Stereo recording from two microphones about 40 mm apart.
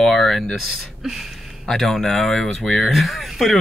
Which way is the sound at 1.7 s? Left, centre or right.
Centre.